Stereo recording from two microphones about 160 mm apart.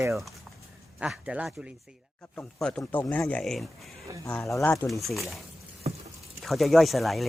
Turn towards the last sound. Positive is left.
turn(degrees=0)  # may be behind; listen again after turning